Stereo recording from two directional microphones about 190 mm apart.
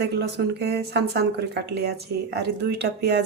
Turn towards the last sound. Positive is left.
turn(degrees=-60)  # may be behind; listen again after turning